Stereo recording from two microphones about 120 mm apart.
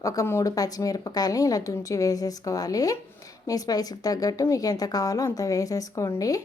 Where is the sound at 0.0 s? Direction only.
25° left (ahead or behind).